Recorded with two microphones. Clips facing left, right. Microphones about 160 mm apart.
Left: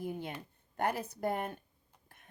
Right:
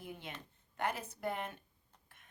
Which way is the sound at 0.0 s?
40° left (ahead or behind).